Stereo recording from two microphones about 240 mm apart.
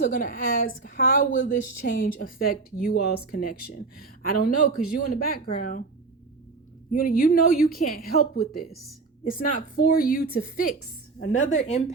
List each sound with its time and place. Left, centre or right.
0.0 s speech: left
6.9 s speech: left
11.2 s a woman's voice: left
11.4 s speech: left